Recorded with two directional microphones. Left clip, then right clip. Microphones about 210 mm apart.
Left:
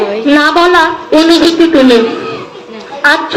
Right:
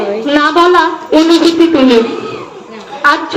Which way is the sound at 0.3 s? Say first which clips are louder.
Left 1 dB; 50° left (ahead or behind).